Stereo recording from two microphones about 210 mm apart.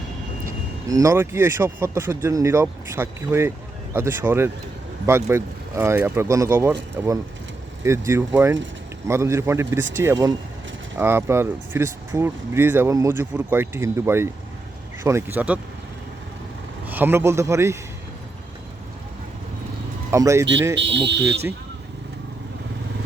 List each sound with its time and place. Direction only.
0.4 s speech: 15° right (ahead or behind)
16.8 s speech: 10° right (ahead or behind)
20.1 s speech: 15° right (ahead or behind)
20.7 s speech: 60° right (ahead or behind)